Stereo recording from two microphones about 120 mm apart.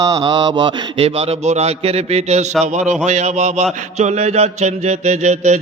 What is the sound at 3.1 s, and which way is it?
Mantra, 75° right (ahead or behind).